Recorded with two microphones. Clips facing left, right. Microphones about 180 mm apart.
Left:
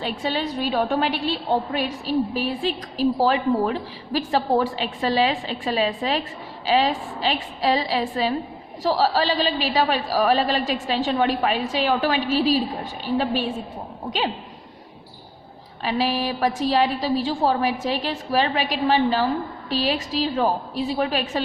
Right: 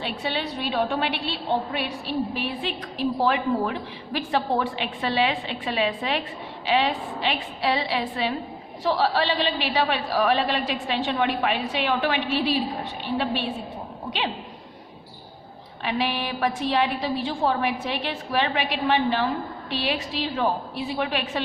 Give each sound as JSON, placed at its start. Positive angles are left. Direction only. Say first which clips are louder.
{"t": 0.0, "sound": "a woman's voice", "louder": "left 3 dB", "side_deg": 40}
{"t": 15.8, "sound": "a woman's voice", "louder": "left 3 dB", "side_deg": 35}